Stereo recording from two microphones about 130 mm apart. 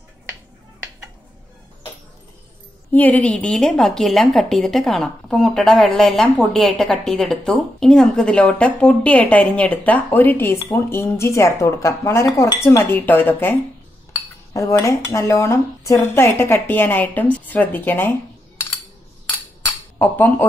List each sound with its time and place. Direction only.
2.9 s a woman's voice: 15° left (ahead or behind)
20.0 s speech: 15° left (ahead or behind)